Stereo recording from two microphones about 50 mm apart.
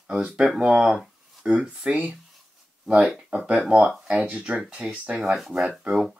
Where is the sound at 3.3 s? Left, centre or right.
Right.